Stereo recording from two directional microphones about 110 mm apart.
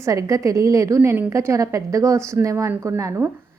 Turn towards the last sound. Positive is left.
turn(degrees=-30)  # may be behind; listen again after turning